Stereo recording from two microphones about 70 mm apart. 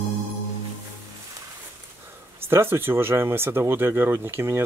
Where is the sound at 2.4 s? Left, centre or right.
Right.